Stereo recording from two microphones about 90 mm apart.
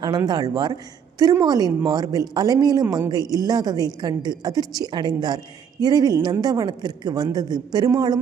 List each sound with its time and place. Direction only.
0.3 s a woman's voice: 50° right (ahead or behind)